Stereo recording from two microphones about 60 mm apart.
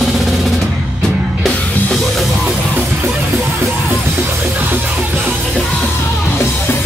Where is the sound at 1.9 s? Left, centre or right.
Centre.